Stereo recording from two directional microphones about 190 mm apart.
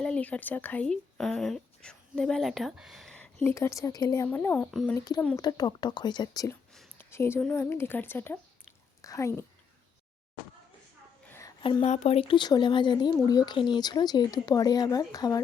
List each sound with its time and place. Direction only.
0.0 s speech: 5° left (ahead or behind)
3.5 s speech: 15° left (ahead or behind)
4.9 s a woman's voice: 20° left (ahead or behind)
11.3 s a sound: 15° left (ahead or behind)
11.6 s speech: 30° left (ahead or behind)